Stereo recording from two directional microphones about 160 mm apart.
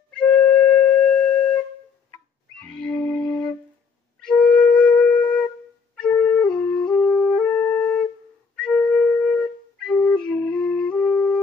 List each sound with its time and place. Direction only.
0.1 s flute: 5° left (ahead or behind)
0.5 s wind instrument: 5° left (ahead or behind)
2.6 s music: 5° left (ahead or behind)
4.2 s flute: 5° left (ahead or behind)
7.0 s music: 5° left (ahead or behind)
8.5 s flute: 5° left (ahead or behind)